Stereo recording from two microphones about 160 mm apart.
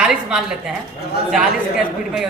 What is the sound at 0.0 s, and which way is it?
Speech, 5° right (ahead or behind).